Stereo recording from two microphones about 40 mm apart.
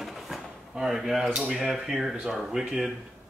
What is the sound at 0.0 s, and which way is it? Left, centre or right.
Drawer open or close, centre.